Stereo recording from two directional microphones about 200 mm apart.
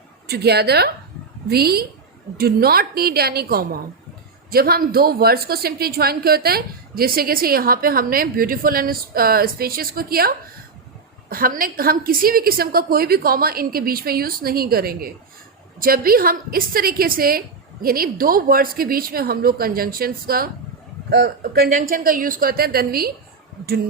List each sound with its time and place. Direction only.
0.3 s a woman's voice: 55° right (ahead or behind)